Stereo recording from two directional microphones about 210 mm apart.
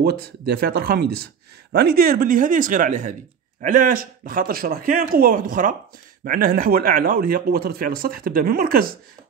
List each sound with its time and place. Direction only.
0.0 s speech: 50° right (ahead or behind)